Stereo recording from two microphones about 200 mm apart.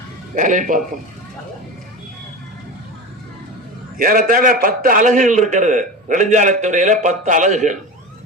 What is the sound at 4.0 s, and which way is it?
A man's voice, 45° right (ahead or behind).